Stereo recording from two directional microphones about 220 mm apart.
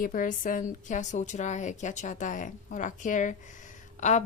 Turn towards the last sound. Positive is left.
turn(degrees=35)  # may be behind; listen again after turning